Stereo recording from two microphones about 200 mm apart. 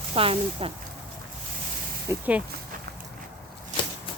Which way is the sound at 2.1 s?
5° right (ahead or behind).